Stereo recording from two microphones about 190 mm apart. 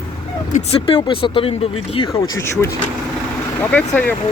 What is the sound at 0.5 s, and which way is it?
Speech, 30° left (ahead or behind).